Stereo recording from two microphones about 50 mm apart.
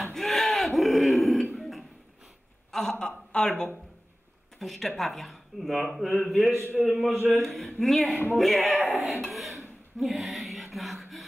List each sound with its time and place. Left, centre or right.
0.0 s a sound: centre
2.7 s speech: centre
4.6 s a man's voice: centre
7.4 s speech: centre